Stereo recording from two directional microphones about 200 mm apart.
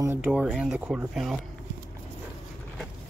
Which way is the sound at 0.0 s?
10° right (ahead or behind).